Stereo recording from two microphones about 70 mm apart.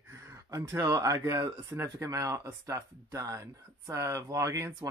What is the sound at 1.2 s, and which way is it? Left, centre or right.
Speech, right.